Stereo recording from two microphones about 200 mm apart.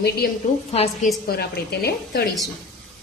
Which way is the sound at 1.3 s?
50° left (ahead or behind).